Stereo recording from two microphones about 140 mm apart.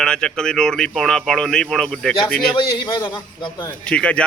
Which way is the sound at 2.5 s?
30° left (ahead or behind).